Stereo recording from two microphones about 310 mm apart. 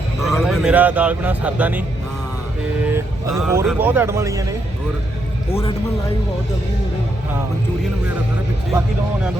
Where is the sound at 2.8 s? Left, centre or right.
Centre.